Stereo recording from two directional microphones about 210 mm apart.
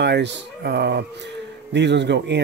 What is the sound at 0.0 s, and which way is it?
Speech, 55° right (ahead or behind).